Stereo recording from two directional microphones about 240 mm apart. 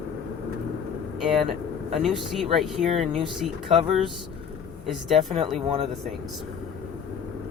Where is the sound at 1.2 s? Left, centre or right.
Centre.